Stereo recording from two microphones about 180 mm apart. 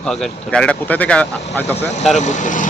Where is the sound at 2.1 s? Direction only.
40° left (ahead or behind).